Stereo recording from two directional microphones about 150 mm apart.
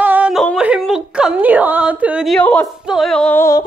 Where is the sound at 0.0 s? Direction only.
10° right (ahead or behind).